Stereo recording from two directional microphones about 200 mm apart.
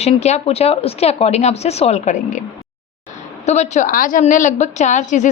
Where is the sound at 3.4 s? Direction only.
35° left (ahead or behind).